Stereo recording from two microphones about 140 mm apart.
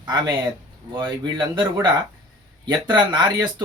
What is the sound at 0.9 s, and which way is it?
Speech, 35° right (ahead or behind).